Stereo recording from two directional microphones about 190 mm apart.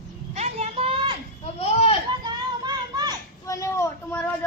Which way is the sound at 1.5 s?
30° left (ahead or behind).